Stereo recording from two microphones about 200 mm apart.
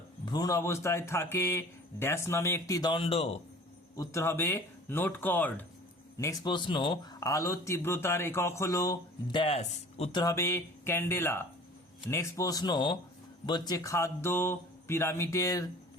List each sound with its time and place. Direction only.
0.3 s speech: 20° left (ahead or behind)
3.9 s speech: 15° left (ahead or behind)